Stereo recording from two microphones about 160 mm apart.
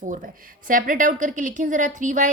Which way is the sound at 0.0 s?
55° right (ahead or behind).